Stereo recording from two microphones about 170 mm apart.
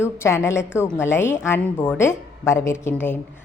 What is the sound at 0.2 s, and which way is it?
A woman's voice, 15° left (ahead or behind).